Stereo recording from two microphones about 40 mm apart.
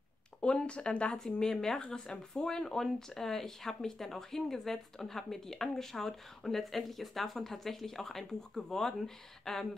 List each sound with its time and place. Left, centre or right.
0.4 s speech: left
1.1 s speech: centre